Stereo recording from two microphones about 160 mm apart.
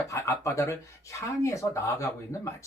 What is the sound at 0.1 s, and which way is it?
Speech, 20° left (ahead or behind).